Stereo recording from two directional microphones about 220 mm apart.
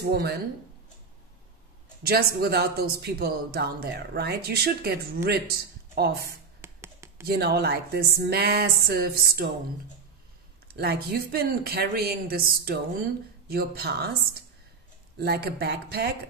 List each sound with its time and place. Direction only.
0.0 s speech: 45° right (ahead or behind)
2.0 s speech: 45° right (ahead or behind)
6.6 s a sound: 10° right (ahead or behind)
7.2 s speech: 45° right (ahead or behind)
10.7 s speech: 45° right (ahead or behind)